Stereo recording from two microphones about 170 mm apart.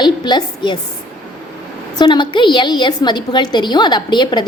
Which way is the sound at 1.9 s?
25° left (ahead or behind).